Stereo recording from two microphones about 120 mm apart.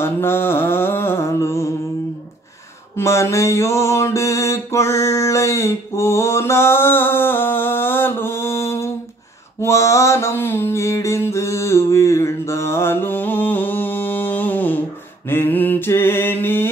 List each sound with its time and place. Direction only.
0.0 s mantra: 20° left (ahead or behind)
3.0 s mantra: 25° left (ahead or behind)